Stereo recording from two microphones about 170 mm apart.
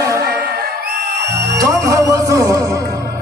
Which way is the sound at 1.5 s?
20° right (ahead or behind).